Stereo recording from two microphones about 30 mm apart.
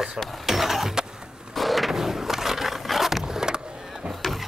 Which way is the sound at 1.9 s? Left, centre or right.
Centre.